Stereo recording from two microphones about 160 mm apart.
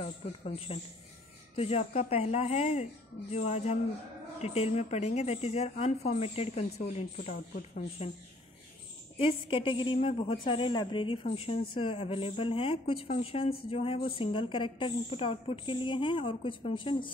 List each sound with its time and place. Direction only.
0.0 s a woman's voice: 40° left (ahead or behind)
9.5 s a woman's voice: 30° left (ahead or behind)